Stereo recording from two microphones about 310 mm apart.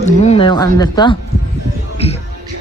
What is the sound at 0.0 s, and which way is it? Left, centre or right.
Speech, left.